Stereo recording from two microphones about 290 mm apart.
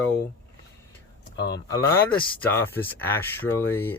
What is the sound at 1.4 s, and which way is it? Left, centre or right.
Speech, left.